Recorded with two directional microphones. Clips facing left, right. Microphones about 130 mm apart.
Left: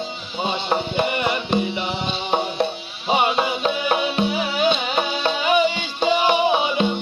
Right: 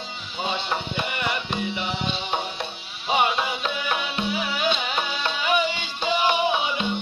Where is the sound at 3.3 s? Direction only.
35° left (ahead or behind).